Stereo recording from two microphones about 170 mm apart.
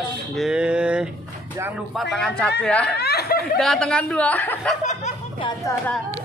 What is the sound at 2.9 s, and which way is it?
Speech, 70° left (ahead or behind).